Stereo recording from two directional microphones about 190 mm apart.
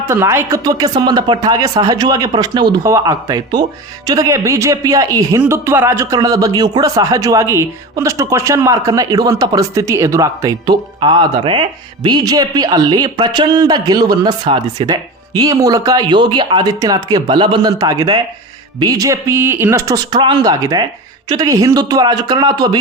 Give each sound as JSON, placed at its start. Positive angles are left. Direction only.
{"t": 0.1, "sound": "speech", "side_deg": -15}